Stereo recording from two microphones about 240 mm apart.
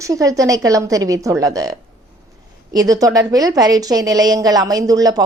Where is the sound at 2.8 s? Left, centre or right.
Centre.